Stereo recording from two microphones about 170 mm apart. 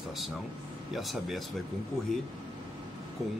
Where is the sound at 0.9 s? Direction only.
Centre (ahead or behind).